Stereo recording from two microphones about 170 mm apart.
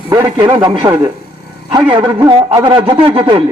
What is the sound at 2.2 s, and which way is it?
A man's voice, 25° right (ahead or behind).